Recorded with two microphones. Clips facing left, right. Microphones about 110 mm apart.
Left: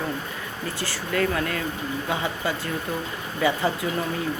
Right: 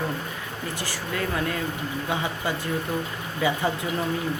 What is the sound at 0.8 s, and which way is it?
Speech, 15° right (ahead or behind).